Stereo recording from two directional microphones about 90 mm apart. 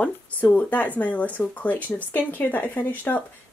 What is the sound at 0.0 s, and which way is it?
Speech, 15° left (ahead or behind).